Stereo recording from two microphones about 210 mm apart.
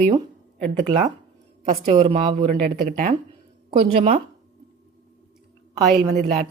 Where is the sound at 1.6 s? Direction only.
30° right (ahead or behind).